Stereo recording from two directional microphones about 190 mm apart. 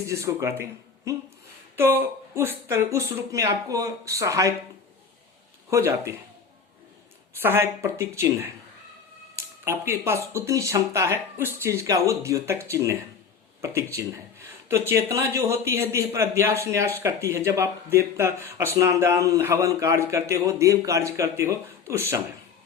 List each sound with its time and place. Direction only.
0.1 s speech: 15° right (ahead or behind)
1.7 s speech: 15° right (ahead or behind)
5.7 s speech: 15° right (ahead or behind)
7.3 s speech: 15° right (ahead or behind)
9.6 s speech: 15° right (ahead or behind)